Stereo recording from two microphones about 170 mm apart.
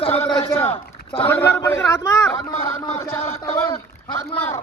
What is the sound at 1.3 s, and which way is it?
Speech, 10° left (ahead or behind).